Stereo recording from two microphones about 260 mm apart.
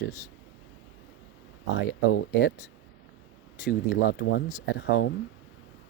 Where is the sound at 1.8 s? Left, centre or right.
Left.